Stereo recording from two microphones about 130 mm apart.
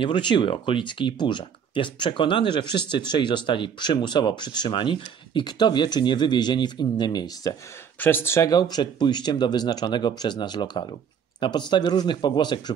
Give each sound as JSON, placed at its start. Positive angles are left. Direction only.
{"t": 0.0, "sound": "speech", "side_deg": 35}
{"t": 8.0, "sound": "speech", "side_deg": 15}